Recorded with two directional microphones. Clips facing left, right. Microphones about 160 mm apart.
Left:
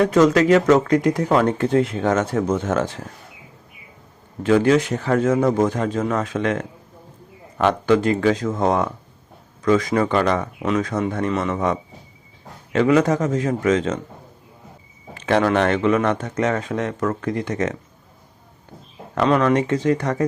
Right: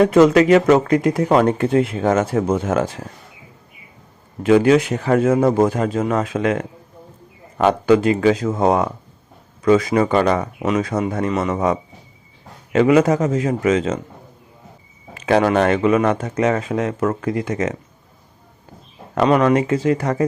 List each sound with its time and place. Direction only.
0.0 s speech: 20° right (ahead or behind)
0.4 s speech: 10° right (ahead or behind)
4.4 s speech: 15° right (ahead or behind)
5.3 s speech: 30° right (ahead or behind)
5.6 s speech: 10° right (ahead or behind)
15.3 s speech: 10° right (ahead or behind)
17.0 s speech: 20° right (ahead or behind)
17.2 s speech: 10° right (ahead or behind)
19.1 s speech: 15° right (ahead or behind)